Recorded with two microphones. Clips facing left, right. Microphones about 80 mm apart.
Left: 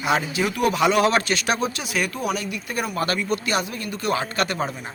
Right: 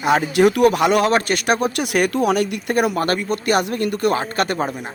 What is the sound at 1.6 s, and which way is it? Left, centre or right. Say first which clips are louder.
Speech: right 6 dB; right.